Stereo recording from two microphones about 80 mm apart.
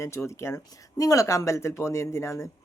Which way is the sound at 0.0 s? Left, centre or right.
Left.